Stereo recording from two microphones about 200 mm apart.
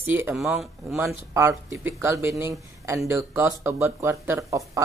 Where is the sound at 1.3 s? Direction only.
15° right (ahead or behind).